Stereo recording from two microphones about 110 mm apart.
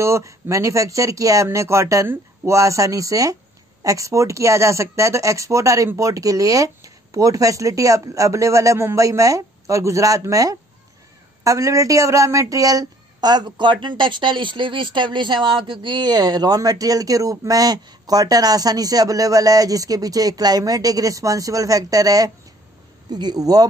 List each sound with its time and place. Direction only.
0.0 s a woman's voice: 25° right (ahead or behind)